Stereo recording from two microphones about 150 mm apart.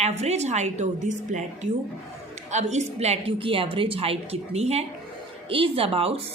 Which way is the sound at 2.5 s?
50° right (ahead or behind).